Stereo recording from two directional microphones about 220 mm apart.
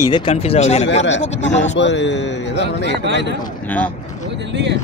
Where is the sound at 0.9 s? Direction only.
55° left (ahead or behind).